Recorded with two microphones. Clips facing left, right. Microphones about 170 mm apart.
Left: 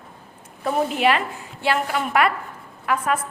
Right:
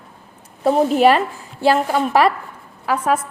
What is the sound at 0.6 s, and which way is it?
A woman's voice, 35° right (ahead or behind).